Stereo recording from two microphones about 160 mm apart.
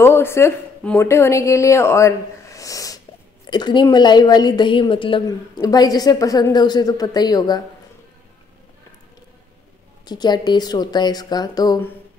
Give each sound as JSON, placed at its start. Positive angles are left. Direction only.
{"t": 0.0, "sound": "a woman's voice", "side_deg": 15}
{"t": 5.2, "sound": "a woman's voice", "side_deg": 25}
{"t": 10.0, "sound": "a woman's voice", "side_deg": 25}